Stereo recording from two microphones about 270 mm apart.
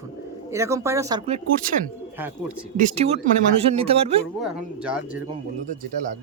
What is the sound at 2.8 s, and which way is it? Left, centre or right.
Speech, right.